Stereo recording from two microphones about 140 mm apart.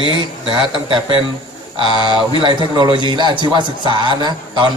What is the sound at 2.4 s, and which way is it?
A man's voice, 35° right (ahead or behind).